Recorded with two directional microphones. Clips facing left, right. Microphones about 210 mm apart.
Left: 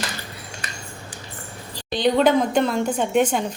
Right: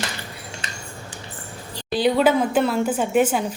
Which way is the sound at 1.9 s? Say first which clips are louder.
Even; 5° right (ahead or behind).